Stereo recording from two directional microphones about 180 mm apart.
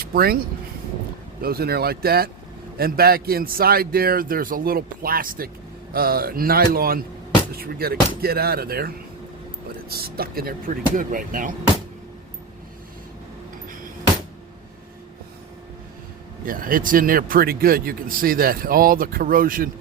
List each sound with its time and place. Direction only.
0.0 s a man's voice: 55° right (ahead or behind)
16.5 s speech: 50° right (ahead or behind)